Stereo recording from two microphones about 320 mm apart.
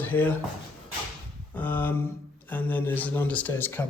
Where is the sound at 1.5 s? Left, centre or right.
Centre.